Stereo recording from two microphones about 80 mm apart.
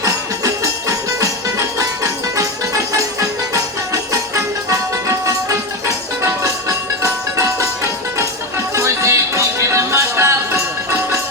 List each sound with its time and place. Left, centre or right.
0.0 s music: right